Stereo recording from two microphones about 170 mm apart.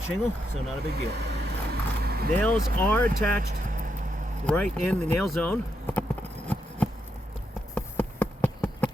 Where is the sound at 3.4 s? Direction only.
55° right (ahead or behind).